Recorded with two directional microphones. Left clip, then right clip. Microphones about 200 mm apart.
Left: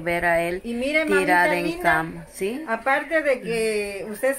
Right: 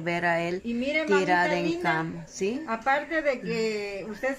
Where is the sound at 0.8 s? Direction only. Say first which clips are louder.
Left 4 dB; 60° left (ahead or behind).